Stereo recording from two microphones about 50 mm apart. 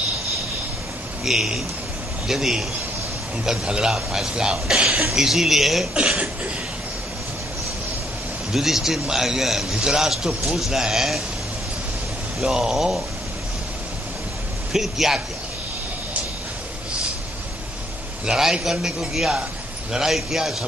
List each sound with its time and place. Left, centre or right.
1.2 s a man's voice: centre
5.9 s cough: right
8.5 s a man's voice: centre
12.4 s a man's voice: centre
14.7 s a man's voice: centre
18.2 s a man's voice: centre